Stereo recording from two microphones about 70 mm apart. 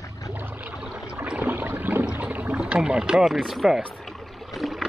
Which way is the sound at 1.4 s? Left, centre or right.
Right.